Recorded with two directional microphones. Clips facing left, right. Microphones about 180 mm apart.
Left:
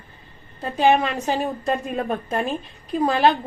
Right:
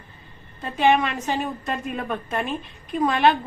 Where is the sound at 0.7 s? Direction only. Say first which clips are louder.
Left 1 dB; 35° left (ahead or behind).